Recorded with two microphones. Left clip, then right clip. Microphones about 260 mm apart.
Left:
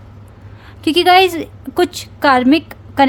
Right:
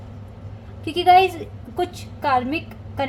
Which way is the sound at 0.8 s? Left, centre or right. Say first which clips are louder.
Left 5 dB; left.